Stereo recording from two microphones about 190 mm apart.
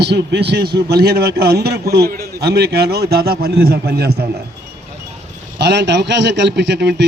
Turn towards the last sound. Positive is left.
turn(degrees=-65)  # may be behind; listen again after turning